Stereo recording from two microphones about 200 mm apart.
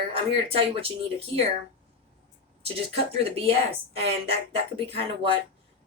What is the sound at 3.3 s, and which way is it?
A woman's voice, 30° right (ahead or behind).